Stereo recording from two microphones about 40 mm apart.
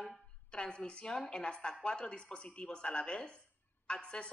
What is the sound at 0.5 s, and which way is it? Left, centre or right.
A woman's voice, left.